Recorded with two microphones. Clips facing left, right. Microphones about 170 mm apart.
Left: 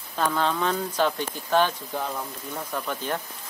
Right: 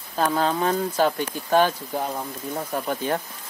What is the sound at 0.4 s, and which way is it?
Speech, 40° right (ahead or behind).